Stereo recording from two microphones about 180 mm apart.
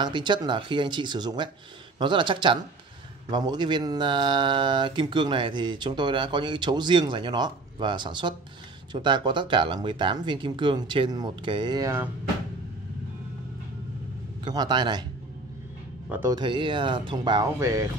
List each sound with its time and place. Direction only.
0.0 s speech: 25° right (ahead or behind)
14.4 s speech: 25° right (ahead or behind)
16.1 s speech: 15° right (ahead or behind)
16.3 s speech: 25° right (ahead or behind)